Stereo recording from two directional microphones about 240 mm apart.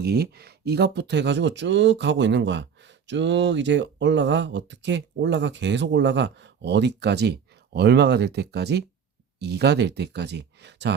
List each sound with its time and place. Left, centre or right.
0.0 s speech: right